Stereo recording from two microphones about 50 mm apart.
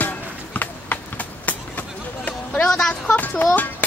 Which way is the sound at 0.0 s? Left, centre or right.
Left.